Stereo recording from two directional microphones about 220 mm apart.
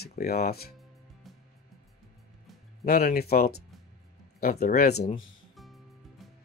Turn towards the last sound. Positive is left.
turn(degrees=0)  # may be behind; listen again after turning